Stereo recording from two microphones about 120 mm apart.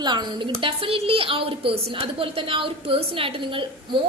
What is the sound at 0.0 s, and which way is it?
A woman's voice, 40° right (ahead or behind).